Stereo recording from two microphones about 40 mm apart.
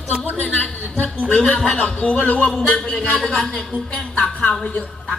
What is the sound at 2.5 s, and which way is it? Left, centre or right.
A man's voice, centre.